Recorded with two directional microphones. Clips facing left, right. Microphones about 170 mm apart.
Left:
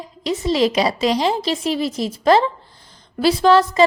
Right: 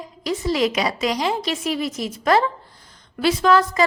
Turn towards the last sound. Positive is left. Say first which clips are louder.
# left 3 dB
turn(degrees=30)  # may be behind; listen again after turning